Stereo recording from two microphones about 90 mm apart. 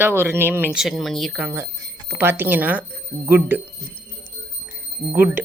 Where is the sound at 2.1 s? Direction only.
25° right (ahead or behind).